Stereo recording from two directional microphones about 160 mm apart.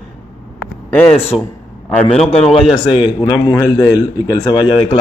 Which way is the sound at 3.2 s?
20° left (ahead or behind).